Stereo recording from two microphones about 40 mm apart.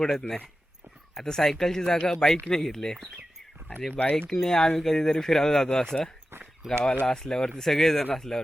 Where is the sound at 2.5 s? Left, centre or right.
Centre.